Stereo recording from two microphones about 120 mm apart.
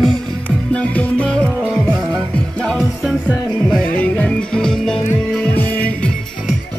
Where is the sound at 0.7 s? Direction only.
10° left (ahead or behind).